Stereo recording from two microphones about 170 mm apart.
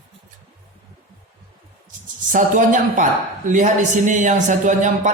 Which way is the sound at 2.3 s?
50° right (ahead or behind).